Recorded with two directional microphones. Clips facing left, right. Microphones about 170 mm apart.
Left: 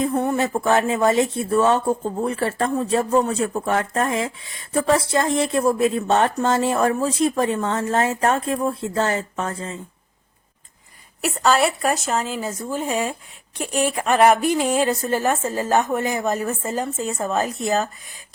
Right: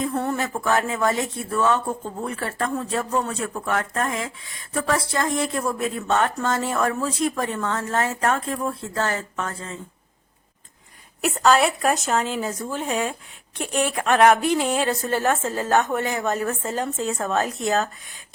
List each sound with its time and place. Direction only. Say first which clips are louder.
0.0 s speech: left 4 dB; 20° left (ahead or behind)
11.2 s a woman's voice: even; centre (ahead or behind)